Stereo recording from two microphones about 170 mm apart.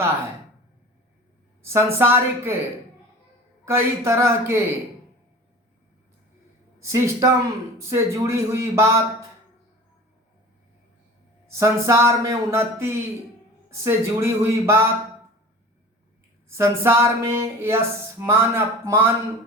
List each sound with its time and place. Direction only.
1.6 s speech: 15° right (ahead or behind)
3.7 s speech: 15° right (ahead or behind)
6.9 s speech: 20° right (ahead or behind)
11.4 s speech: 15° right (ahead or behind)
16.5 s speech: 15° right (ahead or behind)